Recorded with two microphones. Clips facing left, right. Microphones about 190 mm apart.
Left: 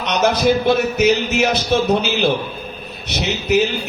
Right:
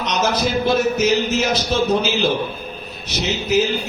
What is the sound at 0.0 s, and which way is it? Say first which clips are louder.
A man's voice: left 4 dB; 60° left (ahead or behind).